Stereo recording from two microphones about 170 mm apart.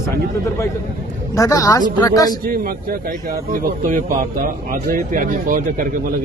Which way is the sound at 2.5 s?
55° right (ahead or behind).